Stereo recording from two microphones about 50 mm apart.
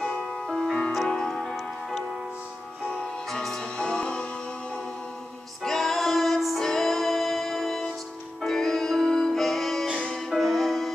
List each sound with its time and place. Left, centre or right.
0.3 s music: centre
3.3 s music: centre
5.6 s music: centre
9.9 s music: centre
10.3 s music: centre